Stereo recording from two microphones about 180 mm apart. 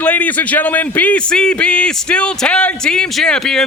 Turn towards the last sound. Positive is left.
turn(degrees=5)  # may be behind; listen again after turning